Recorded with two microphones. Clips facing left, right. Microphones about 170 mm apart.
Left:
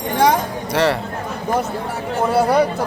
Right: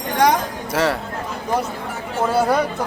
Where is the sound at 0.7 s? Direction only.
Centre (ahead or behind).